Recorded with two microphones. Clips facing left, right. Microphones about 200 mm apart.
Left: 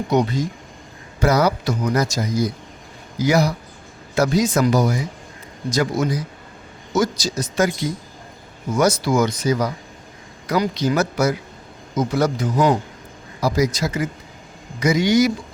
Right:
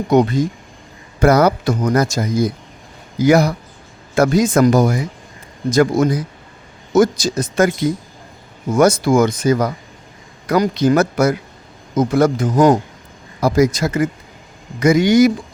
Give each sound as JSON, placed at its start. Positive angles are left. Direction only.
{"t": 0.1, "sound": "speech", "side_deg": -50}